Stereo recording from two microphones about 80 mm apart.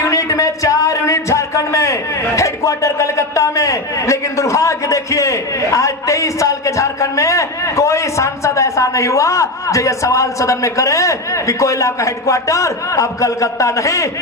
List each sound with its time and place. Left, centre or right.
0.0 s speech: left